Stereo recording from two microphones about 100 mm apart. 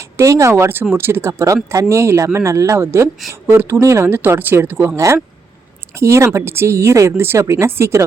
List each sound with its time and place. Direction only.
0.0 s speech: 30° right (ahead or behind)
4.9 s speech: 30° right (ahead or behind)